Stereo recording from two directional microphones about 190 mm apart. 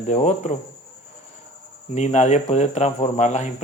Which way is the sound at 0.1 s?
40° left (ahead or behind).